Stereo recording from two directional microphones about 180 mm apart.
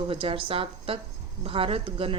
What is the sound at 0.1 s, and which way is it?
Speech, 30° right (ahead or behind).